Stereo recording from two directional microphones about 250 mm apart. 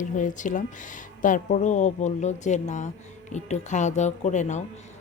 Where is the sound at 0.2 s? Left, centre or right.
Left.